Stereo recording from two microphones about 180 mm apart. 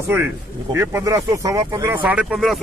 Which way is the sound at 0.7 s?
15° right (ahead or behind).